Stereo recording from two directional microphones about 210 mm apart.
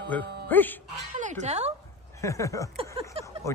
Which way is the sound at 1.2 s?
35° right (ahead or behind).